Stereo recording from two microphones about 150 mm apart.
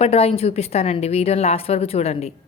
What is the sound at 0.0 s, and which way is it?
Speech, 40° left (ahead or behind).